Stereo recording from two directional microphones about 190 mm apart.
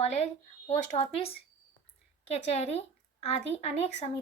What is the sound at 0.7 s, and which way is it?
Speech, 35° left (ahead or behind).